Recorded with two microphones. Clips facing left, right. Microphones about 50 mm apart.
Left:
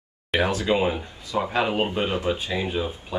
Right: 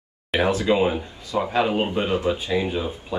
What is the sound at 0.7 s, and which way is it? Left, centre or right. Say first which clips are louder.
Speech: right 2 dB; centre.